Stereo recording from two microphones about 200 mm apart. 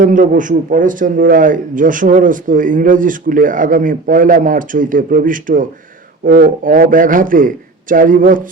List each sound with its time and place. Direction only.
0.0 s a man's voice: 40° right (ahead or behind)